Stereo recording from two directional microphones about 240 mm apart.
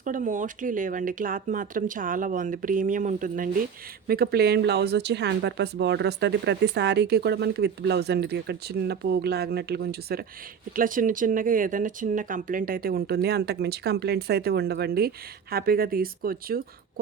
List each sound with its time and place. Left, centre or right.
0.0 s speech: right